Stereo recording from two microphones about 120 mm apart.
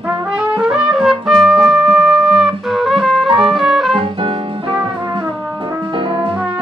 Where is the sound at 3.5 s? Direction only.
5° right (ahead or behind).